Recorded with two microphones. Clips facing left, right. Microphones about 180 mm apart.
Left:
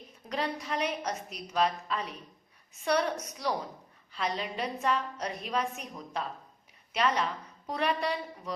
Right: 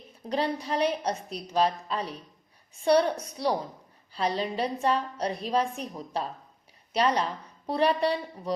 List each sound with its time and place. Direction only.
0.3 s a woman's voice: 30° right (ahead or behind)